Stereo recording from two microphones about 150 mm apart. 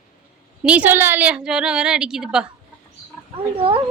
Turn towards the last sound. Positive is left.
turn(degrees=-35)  # may be behind; listen again after turning